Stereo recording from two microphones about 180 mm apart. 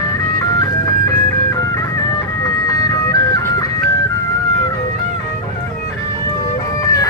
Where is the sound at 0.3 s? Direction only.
20° left (ahead or behind).